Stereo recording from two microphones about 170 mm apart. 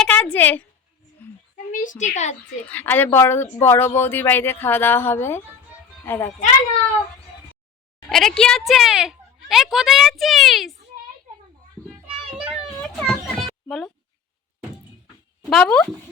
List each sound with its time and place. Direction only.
0.0 s a sound: 5° left (ahead or behind)
1.7 s a woman's voice: 50° left (ahead or behind)
2.6 s speech: 10° left (ahead or behind)
8.1 s a woman's voice: 5° left (ahead or behind)
12.0 s child singing: 5° right (ahead or behind)
12.8 s children playing: 5° left (ahead or behind)
15.4 s a woman's voice: 5° left (ahead or behind)